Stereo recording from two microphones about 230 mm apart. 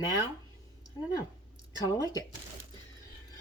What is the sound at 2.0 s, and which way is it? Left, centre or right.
Speech, centre.